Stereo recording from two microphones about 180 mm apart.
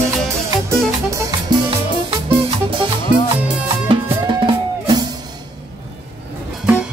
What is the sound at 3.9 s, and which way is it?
Music, 25° right (ahead or behind).